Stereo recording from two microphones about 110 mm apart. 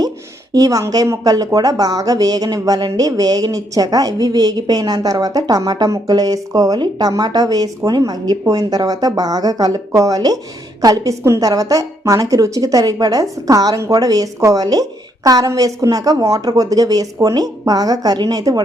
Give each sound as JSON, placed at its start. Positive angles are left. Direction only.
{"t": 0.5, "sound": "speech", "side_deg": -35}